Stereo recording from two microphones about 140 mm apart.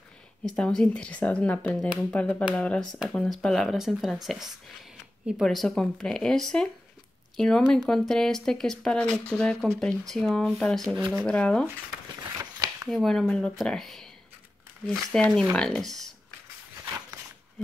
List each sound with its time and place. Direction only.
0.5 s speech: 5° left (ahead or behind)
12.4 s a sound: 20° right (ahead or behind)
12.9 s speech: centre (ahead or behind)